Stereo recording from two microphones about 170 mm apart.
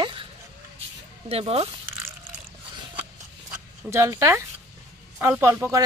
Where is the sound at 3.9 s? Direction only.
15° right (ahead or behind).